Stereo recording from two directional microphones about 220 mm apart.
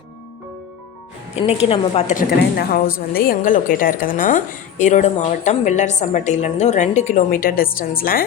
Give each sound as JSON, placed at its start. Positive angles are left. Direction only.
{"t": 1.4, "sound": "a woman's voice", "side_deg": 30}